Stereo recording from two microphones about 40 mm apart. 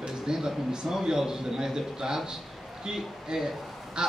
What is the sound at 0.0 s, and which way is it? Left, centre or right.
A man's voice, centre.